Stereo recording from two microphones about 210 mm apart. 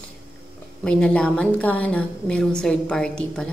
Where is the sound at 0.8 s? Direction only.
5° left (ahead or behind).